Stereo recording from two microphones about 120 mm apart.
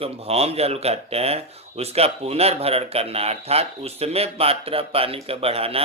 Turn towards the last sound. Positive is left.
turn(degrees=-55)  # may be behind; listen again after turning